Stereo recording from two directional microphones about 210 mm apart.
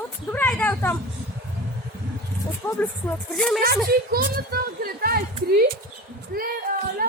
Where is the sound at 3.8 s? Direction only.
50° right (ahead or behind).